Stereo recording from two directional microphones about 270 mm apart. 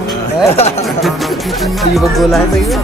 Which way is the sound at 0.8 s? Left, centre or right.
Centre.